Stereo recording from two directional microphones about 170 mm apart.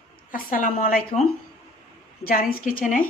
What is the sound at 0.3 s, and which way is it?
Speech, 55° left (ahead or behind).